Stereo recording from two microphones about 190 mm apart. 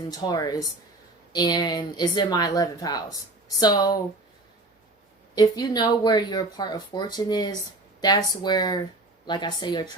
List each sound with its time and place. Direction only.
0.1 s speech: 20° left (ahead or behind)
5.3 s speech: 20° left (ahead or behind)